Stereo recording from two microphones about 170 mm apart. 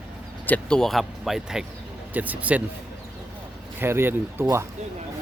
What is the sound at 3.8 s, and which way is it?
Speech, 15° right (ahead or behind).